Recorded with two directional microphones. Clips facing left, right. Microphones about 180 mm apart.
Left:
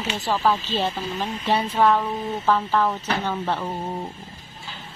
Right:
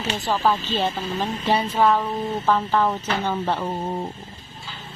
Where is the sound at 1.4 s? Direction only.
Centre (ahead or behind).